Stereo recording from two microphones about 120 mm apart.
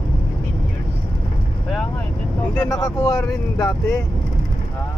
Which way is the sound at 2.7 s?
25° left (ahead or behind).